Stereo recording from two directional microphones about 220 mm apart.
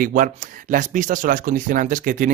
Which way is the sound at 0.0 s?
40° right (ahead or behind).